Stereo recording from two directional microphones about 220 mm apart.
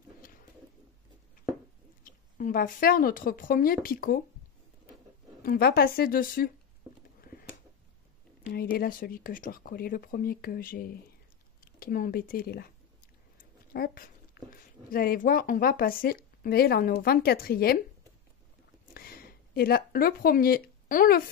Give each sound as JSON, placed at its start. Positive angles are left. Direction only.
{"t": 2.0, "sound": "speech", "side_deg": 35}
{"t": 5.4, "sound": "speech", "side_deg": 45}
{"t": 6.8, "sound": "a sound", "side_deg": -10}
{"t": 8.5, "sound": "speech", "side_deg": 45}
{"t": 13.7, "sound": "speech", "side_deg": 40}
{"t": 18.9, "sound": "a sound", "side_deg": 45}